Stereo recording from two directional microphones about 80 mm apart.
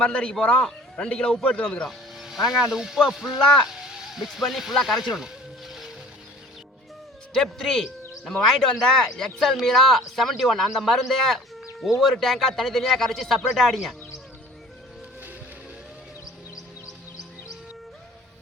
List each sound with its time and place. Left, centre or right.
0.0 s a man's voice: centre
1.9 s speech: centre
3.8 s music: centre
7.3 s speech: centre
16.2 s music: left